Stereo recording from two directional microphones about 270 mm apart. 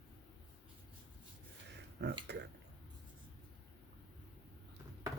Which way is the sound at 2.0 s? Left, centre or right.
Right.